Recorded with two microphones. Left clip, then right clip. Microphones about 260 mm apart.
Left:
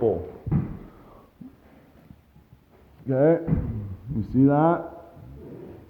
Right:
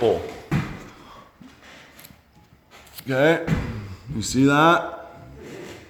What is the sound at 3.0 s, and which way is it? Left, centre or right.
Speech, centre.